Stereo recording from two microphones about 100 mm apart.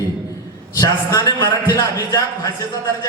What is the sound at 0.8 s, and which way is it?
A man's voice, 40° left (ahead or behind).